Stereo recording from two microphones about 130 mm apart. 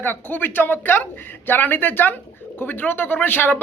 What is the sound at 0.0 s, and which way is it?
Speech, 15° left (ahead or behind).